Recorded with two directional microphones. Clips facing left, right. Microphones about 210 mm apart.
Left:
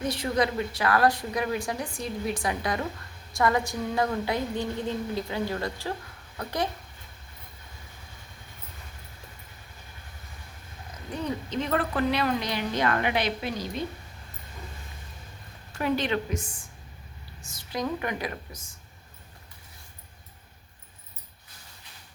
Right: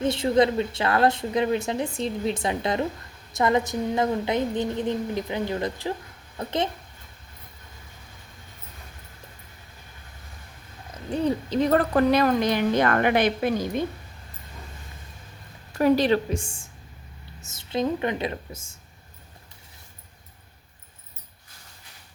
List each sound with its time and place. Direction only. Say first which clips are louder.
0.0 s a woman's voice: right 6 dB; 25° right (ahead or behind)
11.1 s speech: right 7 dB; 30° right (ahead or behind); by 13.8 s 50° right (ahead or behind)
15.8 s a woman's voice: right 7 dB; 35° right (ahead or behind)